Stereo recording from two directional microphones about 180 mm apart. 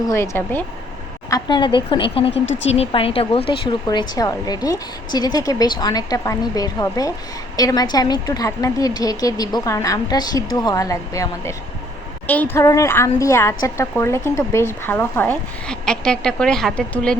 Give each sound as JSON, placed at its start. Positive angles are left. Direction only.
{"t": 0.1, "sound": "a woman's voice", "side_deg": 15}
{"t": 1.3, "sound": "speech", "side_deg": 25}
{"t": 2.3, "sound": "speech", "side_deg": 90}
{"t": 2.6, "sound": "a woman's voice", "side_deg": 35}